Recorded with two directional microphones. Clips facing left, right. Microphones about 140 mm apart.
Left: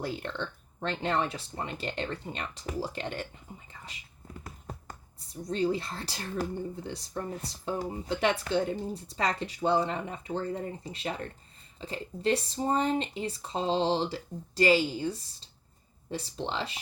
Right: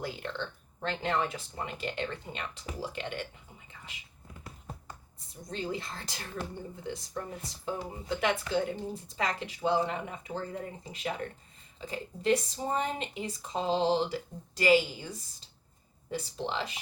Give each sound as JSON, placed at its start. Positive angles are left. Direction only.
{"t": 0.0, "sound": "speech", "side_deg": 35}
{"t": 5.5, "sound": "speech", "side_deg": 35}